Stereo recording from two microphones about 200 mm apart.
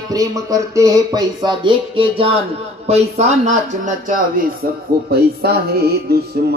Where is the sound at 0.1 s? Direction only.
15° right (ahead or behind); by 4.5 s 40° right (ahead or behind).